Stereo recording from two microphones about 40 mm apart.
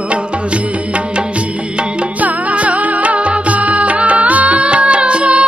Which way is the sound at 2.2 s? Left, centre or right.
Right.